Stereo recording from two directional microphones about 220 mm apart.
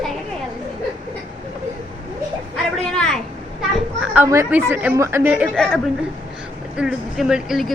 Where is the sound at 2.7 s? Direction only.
Centre (ahead or behind).